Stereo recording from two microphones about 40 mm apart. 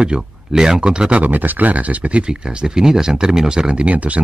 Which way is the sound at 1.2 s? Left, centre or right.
Right.